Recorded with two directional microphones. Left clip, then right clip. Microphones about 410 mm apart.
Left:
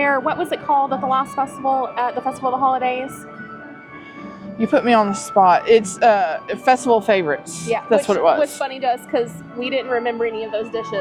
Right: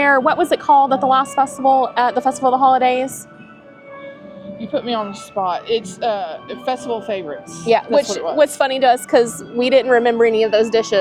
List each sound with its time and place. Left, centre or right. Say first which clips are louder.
0.0 s a woman's voice: right 5 dB; right
4.6 s speech: left 6 dB; left
8.4 s a woman's voice: right 6 dB; right